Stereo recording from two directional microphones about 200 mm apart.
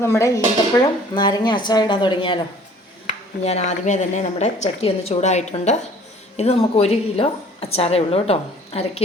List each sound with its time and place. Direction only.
0.0 s speech: 15° left (ahead or behind); by 8.9 s 30° left (ahead or behind)